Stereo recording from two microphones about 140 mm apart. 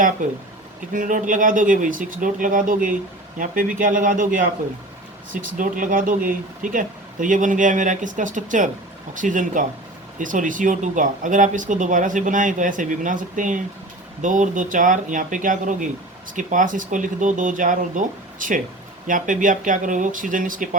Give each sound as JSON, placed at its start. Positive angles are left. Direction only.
{"t": 0.2, "sound": "speech", "side_deg": -70}